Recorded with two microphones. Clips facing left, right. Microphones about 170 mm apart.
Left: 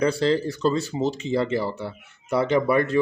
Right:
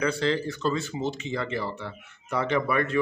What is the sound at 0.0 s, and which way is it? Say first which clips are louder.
Speech: left 5 dB; 35° left (ahead or behind).